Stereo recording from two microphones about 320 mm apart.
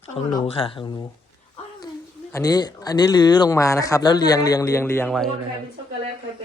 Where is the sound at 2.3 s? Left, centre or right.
Centre.